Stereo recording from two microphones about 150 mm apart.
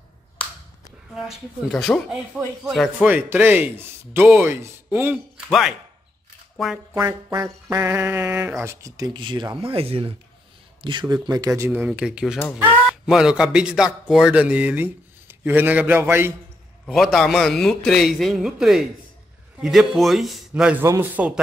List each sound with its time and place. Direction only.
1.1 s a man's voice: centre (ahead or behind)
3.1 s speech: 15° right (ahead or behind)
5.5 s a man's voice: centre (ahead or behind)
7.7 s speech: 15° right (ahead or behind)
16.8 s a man's voice: centre (ahead or behind)
20.8 s speech: 15° right (ahead or behind)